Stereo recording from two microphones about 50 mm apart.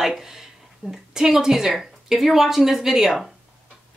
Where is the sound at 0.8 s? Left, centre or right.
Right.